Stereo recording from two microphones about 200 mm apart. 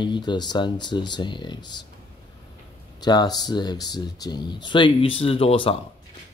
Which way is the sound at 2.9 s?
20° left (ahead or behind).